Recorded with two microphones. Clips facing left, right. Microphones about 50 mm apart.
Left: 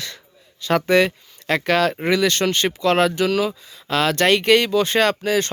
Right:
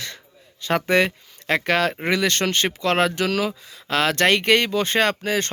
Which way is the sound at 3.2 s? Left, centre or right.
Right.